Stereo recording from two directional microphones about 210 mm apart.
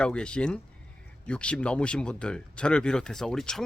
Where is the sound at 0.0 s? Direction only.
5° left (ahead or behind).